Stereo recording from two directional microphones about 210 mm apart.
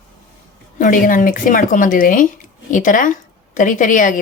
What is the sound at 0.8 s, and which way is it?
Speech, 40° left (ahead or behind).